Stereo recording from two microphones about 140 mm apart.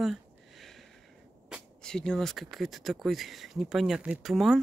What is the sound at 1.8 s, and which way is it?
Speech, 5° left (ahead or behind).